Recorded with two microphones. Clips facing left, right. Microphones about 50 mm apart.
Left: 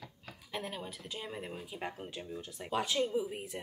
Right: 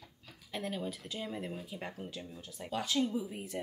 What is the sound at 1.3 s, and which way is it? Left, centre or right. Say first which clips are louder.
A woman's voice: right 2 dB; left.